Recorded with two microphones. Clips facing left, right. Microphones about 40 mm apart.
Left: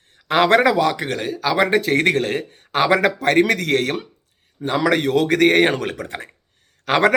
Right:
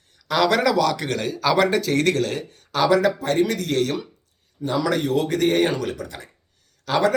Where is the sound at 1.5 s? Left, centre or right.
Left.